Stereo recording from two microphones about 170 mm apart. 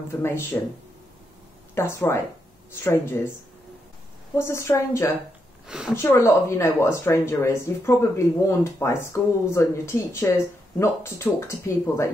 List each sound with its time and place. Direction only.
0.1 s speech: 15° left (ahead or behind)
1.8 s speech: 15° left (ahead or behind)
4.4 s speech: 15° left (ahead or behind)
5.7 s a woman's voice: 5° right (ahead or behind)
5.9 s speech: 15° left (ahead or behind)